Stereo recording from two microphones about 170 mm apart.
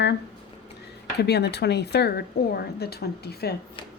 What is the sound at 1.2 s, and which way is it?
A woman's voice, 75° left (ahead or behind).